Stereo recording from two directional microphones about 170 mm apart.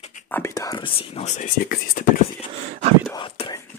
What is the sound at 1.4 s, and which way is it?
Whispering, 50° left (ahead or behind).